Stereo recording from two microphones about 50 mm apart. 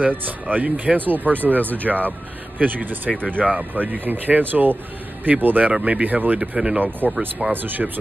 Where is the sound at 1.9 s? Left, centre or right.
Centre.